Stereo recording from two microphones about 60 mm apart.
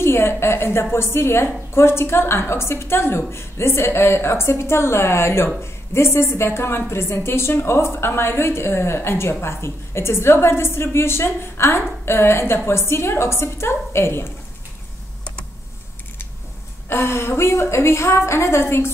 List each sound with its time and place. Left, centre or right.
0.0 s a woman's voice: left
16.9 s a woman's voice: left